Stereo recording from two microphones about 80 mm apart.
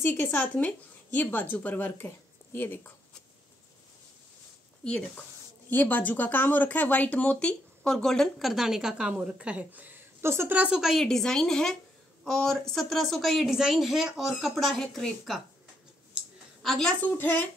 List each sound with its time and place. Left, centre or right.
0.0 s a woman's voice: left
4.8 s speech: centre; by 10.6 s right
10.8 s speech: centre
16.6 s a woman's voice: centre
17.0 s a woman's voice: left